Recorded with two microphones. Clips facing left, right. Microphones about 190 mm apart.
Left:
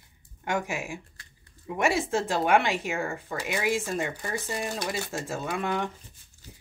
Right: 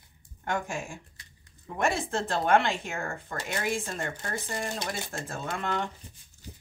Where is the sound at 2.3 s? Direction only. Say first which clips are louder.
Right 1 dB; 15° left (ahead or behind).